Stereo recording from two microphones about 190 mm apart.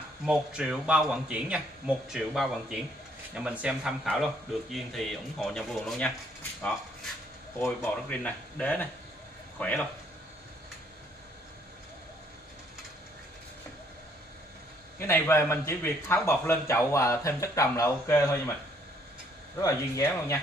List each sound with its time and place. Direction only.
0.2 s speech: 5° right (ahead or behind)
7.6 s a man's voice: 5° left (ahead or behind)
15.0 s a man's voice: 10° left (ahead or behind)
19.6 s a man's voice: 15° left (ahead or behind)